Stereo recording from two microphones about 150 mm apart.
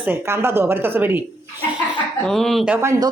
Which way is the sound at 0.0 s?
15° right (ahead or behind).